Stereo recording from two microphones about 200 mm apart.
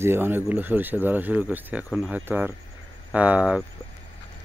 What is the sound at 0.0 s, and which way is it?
Speech, 10° right (ahead or behind).